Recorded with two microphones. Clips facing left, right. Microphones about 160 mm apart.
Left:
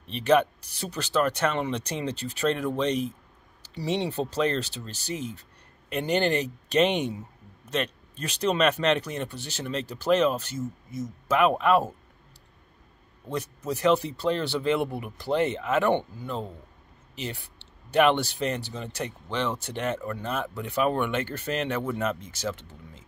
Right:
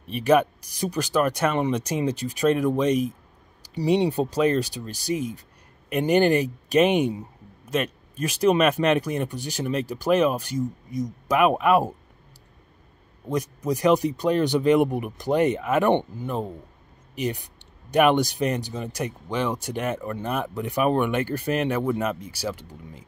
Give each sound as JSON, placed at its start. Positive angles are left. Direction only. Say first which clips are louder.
{"t": 0.0, "sound": "speech", "louder": "right 2 dB", "side_deg": -10}
{"t": 13.3, "sound": "speech", "louder": "right 5 dB", "side_deg": -15}